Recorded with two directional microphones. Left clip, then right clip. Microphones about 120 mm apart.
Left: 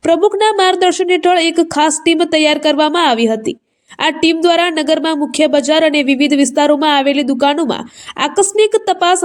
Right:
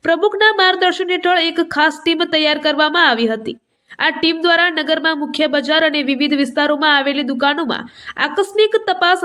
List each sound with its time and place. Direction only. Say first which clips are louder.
0.0 s speech: left 2 dB; 45° left (ahead or behind)